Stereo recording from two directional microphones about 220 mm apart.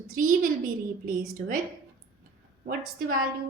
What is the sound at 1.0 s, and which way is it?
Speech, 40° right (ahead or behind).